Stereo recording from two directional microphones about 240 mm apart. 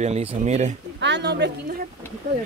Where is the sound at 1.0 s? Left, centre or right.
Right.